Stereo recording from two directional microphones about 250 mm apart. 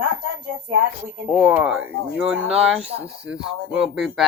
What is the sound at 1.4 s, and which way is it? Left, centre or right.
Speech, centre.